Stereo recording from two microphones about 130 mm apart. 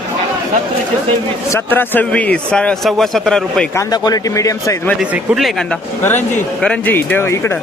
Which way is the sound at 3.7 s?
30° left (ahead or behind).